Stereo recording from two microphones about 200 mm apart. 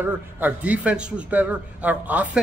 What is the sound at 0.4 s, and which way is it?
A woman's voice, 5° right (ahead or behind).